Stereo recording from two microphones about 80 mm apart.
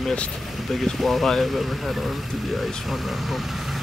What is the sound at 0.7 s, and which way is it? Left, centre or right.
Speech, centre.